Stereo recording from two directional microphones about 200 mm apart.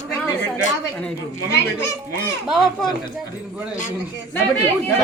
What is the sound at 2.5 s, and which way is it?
Speech, centre (ahead or behind).